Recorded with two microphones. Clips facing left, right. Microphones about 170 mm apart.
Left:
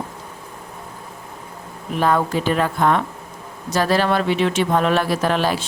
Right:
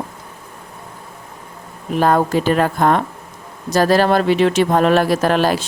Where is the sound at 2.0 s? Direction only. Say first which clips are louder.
Right 3 dB; 45° right (ahead or behind).